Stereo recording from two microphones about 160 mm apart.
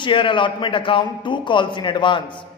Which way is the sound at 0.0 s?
30° left (ahead or behind).